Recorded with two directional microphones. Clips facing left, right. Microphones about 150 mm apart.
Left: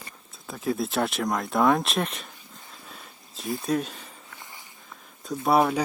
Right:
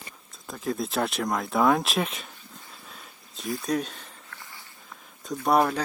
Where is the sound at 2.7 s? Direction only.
Centre (ahead or behind).